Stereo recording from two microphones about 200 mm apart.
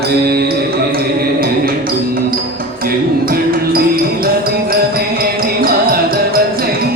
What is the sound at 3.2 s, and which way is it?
Music, 45° right (ahead or behind).